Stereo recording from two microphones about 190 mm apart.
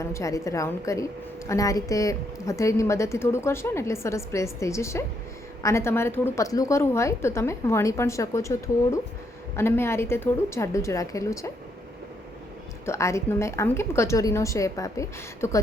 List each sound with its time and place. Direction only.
0.0 s a woman's voice: 15° left (ahead or behind)
12.8 s a woman's voice: 15° left (ahead or behind)